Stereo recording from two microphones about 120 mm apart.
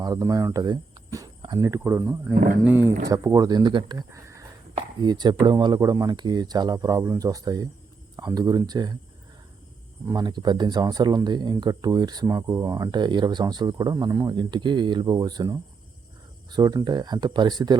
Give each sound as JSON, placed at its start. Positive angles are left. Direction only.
{"t": 0.0, "sound": "speech", "side_deg": -30}
{"t": 3.1, "sound": "speech", "side_deg": -30}
{"t": 4.1, "sound": "a sound", "side_deg": -25}
{"t": 5.0, "sound": "speech", "side_deg": -35}
{"t": 10.1, "sound": "speech", "side_deg": -35}